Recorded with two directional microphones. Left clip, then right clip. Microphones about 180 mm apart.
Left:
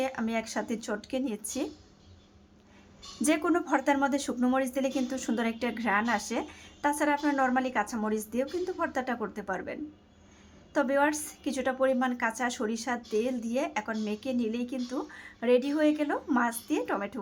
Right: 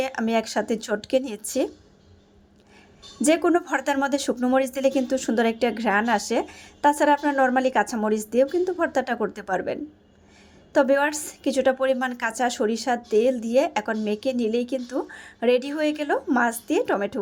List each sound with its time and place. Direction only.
0.0 s a woman's voice: 30° right (ahead or behind)
3.2 s a woman's voice: 30° right (ahead or behind)